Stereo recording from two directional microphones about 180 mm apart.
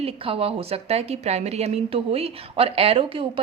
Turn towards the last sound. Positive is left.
turn(degrees=-30)  # may be behind; listen again after turning